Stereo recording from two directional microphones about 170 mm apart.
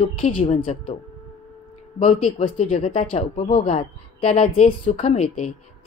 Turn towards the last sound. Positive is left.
turn(degrees=40)  # may be behind; listen again after turning